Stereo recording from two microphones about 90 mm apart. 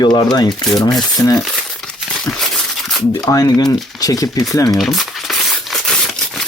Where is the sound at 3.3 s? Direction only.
45° left (ahead or behind).